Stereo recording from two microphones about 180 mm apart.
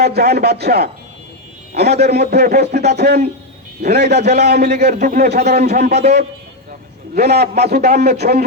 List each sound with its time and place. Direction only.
0.0 s a man's voice: 65° right (ahead or behind)
4.9 s a man's voice: 50° right (ahead or behind)
7.1 s a man's voice: 65° right (ahead or behind)